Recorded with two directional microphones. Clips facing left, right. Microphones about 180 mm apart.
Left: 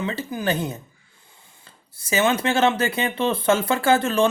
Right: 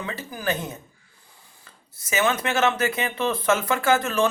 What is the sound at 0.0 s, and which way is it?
Speech, 25° left (ahead or behind).